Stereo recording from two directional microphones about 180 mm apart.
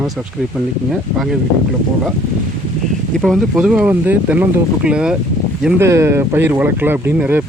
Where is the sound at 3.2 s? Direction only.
Centre (ahead or behind).